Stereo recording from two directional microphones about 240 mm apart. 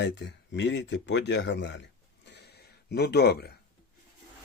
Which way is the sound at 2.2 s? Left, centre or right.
Left.